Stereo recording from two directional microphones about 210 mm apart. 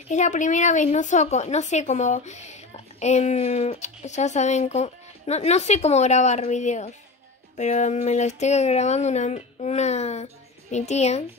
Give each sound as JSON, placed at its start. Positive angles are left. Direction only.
{"t": 0.1, "sound": "speech", "side_deg": 35}